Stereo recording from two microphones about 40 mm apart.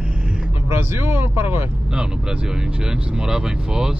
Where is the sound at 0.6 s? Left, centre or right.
Right.